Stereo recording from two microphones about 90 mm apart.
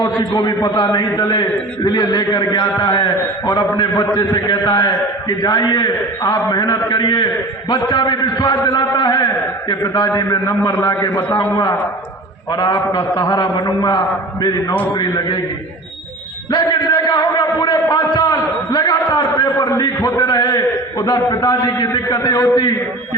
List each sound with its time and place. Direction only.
0.0 s a man's voice: 50° left (ahead or behind)
4.0 s a man's voice: 40° left (ahead or behind)
4.4 s a man's voice: 50° left (ahead or behind)
10.2 s a man's voice: 40° left (ahead or behind)
12.5 s a man's voice: 55° left (ahead or behind)
16.5 s a man's voice: 55° left (ahead or behind)